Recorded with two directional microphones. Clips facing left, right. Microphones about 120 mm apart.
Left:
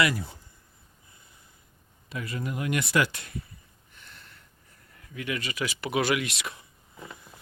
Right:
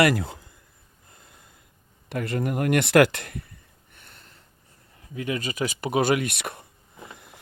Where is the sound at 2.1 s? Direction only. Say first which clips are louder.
Right 7 dB; 60° right (ahead or behind).